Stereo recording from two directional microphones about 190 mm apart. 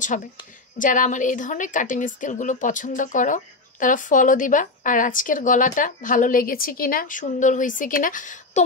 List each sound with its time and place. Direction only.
0.1 s a woman's voice: 40° left (ahead or behind)